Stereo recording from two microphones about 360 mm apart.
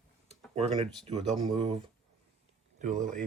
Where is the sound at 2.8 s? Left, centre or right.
Right.